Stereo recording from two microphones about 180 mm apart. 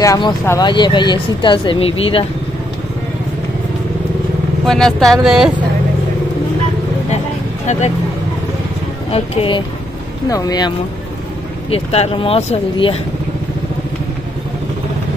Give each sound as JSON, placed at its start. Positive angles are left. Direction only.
{"t": 0.0, "sound": "speech", "side_deg": 15}
{"t": 4.6, "sound": "speech", "side_deg": 0}
{"t": 9.1, "sound": "speech", "side_deg": 30}
{"t": 11.7, "sound": "speech", "side_deg": 35}